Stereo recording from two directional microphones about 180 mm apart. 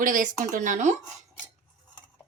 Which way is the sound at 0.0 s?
45° right (ahead or behind).